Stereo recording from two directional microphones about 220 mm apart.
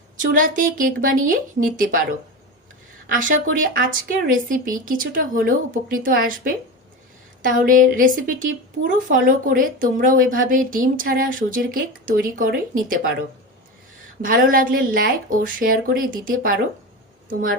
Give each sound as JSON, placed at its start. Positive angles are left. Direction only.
{"t": 0.2, "sound": "a woman's voice", "side_deg": -40}
{"t": 3.1, "sound": "a woman's voice", "side_deg": -35}
{"t": 7.4, "sound": "a woman's voice", "side_deg": -40}
{"t": 14.2, "sound": "a woman's voice", "side_deg": -40}